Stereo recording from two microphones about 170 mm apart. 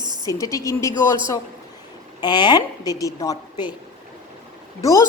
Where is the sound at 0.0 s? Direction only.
25° right (ahead or behind).